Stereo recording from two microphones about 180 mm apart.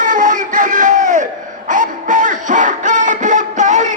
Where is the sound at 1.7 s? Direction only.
45° right (ahead or behind).